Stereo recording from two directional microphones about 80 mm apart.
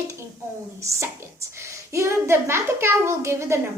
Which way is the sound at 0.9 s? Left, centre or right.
Right.